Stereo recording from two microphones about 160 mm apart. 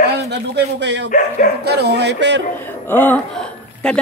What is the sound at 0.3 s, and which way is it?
Speech, 90° right.